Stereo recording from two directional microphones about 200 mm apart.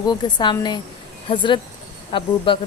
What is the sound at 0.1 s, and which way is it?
A woman's voice, 20° left (ahead or behind).